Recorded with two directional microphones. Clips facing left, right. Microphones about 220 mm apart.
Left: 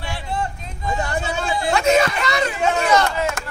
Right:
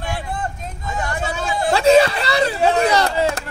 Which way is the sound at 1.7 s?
30° right (ahead or behind).